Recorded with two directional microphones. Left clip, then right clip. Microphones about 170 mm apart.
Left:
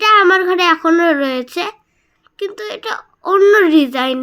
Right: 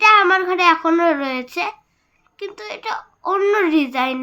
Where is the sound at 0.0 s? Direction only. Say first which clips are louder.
Left 2 dB; 25° left (ahead or behind).